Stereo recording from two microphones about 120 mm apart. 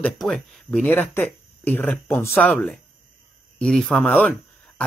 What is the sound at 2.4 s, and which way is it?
Speech, 5° left (ahead or behind).